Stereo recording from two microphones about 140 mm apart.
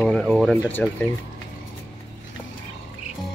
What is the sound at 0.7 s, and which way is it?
Speech, 10° left (ahead or behind).